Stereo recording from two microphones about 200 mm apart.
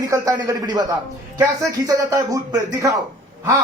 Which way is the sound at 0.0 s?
15° right (ahead or behind).